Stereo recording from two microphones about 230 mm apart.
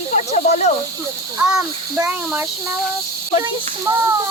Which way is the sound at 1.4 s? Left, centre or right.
Centre.